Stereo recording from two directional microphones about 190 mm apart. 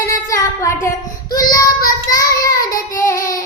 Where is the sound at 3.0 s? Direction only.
15° left (ahead or behind).